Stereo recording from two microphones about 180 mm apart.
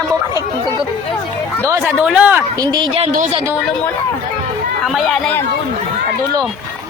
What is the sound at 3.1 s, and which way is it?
Speech, 45° right (ahead or behind).